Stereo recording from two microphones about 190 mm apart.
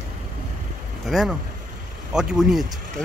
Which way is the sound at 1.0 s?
Centre (ahead or behind).